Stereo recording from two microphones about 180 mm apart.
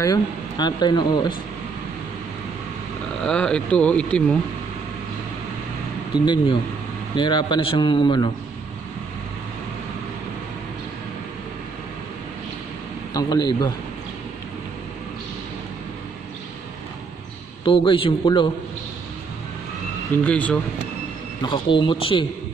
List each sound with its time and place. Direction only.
0.0 s speech: 20° left (ahead or behind)
3.3 s speech: 5° left (ahead or behind)
6.2 s speech: 25° left (ahead or behind)
13.1 s speech: 20° left (ahead or behind)
17.6 s speech: 30° left (ahead or behind)
20.2 s speech: 5° left (ahead or behind)
21.4 s speech: 25° left (ahead or behind)